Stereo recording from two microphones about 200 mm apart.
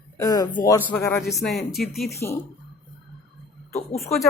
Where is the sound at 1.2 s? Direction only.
Centre (ahead or behind).